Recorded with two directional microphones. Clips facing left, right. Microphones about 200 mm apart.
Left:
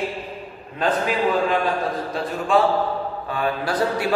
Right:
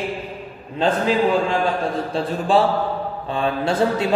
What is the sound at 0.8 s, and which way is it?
A man's voice, 25° right (ahead or behind).